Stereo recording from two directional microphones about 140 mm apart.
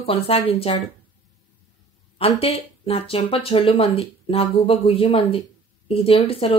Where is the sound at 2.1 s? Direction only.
45° left (ahead or behind).